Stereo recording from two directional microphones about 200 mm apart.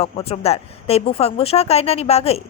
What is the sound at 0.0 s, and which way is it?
Speech, 30° left (ahead or behind).